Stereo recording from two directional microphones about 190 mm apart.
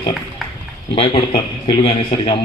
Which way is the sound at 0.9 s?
30° left (ahead or behind).